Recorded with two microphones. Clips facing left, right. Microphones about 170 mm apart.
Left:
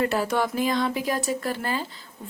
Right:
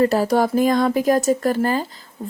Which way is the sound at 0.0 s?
35° right (ahead or behind).